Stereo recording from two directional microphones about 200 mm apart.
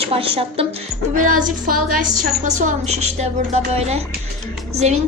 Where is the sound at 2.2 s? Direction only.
40° right (ahead or behind).